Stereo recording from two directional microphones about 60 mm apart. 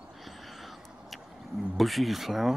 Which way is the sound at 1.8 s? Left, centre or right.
Centre.